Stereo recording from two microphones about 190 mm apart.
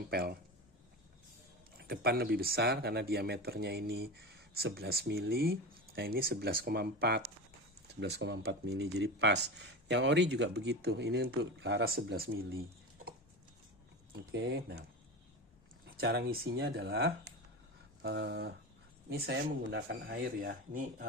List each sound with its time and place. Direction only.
0.1 s speech: 55° right (ahead or behind)
1.8 s speech: 55° right (ahead or behind)
14.3 s speech: 60° right (ahead or behind)
16.3 s speech: 55° right (ahead or behind)